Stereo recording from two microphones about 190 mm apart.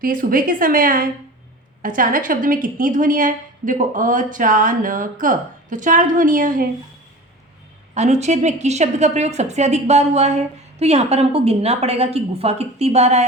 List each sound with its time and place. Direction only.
0.0 s a woman's voice: 45° right (ahead or behind)
7.9 s a woman's voice: 35° right (ahead or behind)